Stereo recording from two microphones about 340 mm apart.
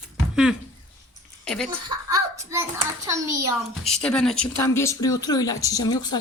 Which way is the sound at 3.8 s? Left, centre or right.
Centre.